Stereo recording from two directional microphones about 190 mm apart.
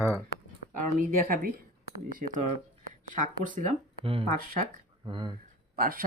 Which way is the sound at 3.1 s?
45° right (ahead or behind).